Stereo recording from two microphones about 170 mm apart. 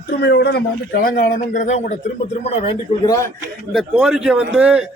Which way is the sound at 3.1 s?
15° left (ahead or behind).